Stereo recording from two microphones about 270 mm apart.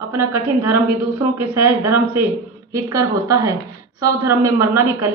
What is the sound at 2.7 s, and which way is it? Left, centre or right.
A woman's voice, centre.